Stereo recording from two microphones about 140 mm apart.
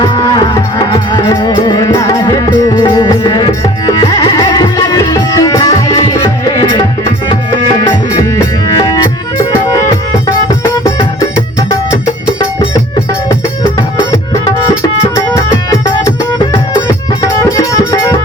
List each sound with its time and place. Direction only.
0.0 s music: 35° left (ahead or behind)
15.1 s music: 20° left (ahead or behind)
17.6 s music: 20° left (ahead or behind)